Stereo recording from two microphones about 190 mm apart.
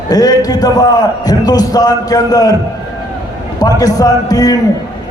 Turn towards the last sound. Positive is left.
turn(degrees=20)  # may be behind; listen again after turning